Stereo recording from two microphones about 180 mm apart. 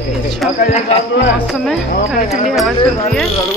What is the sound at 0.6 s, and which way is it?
Speech, 40° left (ahead or behind).